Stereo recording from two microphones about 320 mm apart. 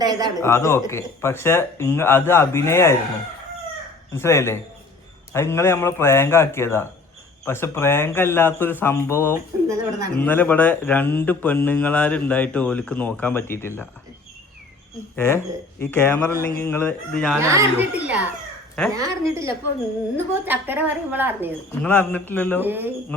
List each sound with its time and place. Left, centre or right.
0.0 s speech: centre
0.3 s speech: centre
4.1 s speech: centre
9.6 s speech: right
10.2 s speech: centre
15.8 s speech: centre
17.4 s a woman's voice: centre
21.8 s speech: centre
22.6 s speech: centre